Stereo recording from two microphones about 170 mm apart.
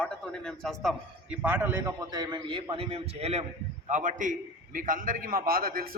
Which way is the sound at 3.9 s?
50° right (ahead or behind).